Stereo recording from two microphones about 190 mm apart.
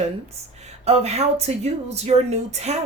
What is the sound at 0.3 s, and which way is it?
Speech, 35° right (ahead or behind).